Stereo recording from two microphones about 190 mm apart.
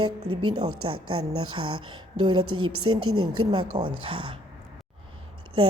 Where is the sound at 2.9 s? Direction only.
90° right.